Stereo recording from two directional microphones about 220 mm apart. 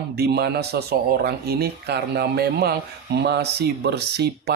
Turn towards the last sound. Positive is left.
turn(degrees=-50)  # may be behind; listen again after turning